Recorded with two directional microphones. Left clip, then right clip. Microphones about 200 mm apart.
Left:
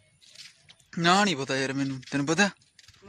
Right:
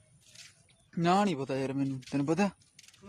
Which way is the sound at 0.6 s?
Centre (ahead or behind).